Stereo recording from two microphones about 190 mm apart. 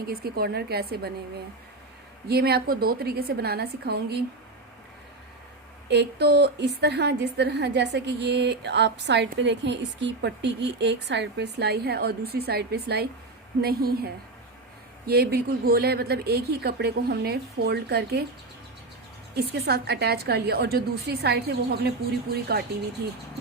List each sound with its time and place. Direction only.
0.0 s a woman's voice: 55° right (ahead or behind)
2.2 s a woman's voice: 55° right (ahead or behind)
5.9 s a woman's voice: 60° right (ahead or behind)
19.5 s a woman's voice: 60° right (ahead or behind)